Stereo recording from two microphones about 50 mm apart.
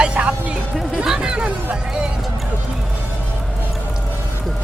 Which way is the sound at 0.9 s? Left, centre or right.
Centre.